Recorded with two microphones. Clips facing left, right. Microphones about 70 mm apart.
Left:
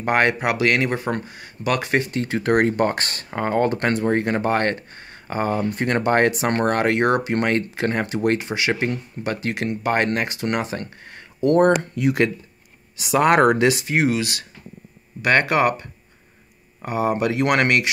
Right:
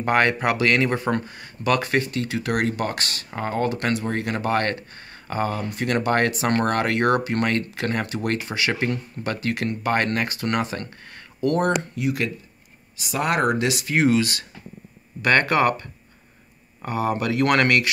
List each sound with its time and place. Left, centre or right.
0.0 s speech: centre
2.2 s speech: left
5.7 s speech: left
6.1 s speech: centre
11.9 s speech: left
13.8 s speech: centre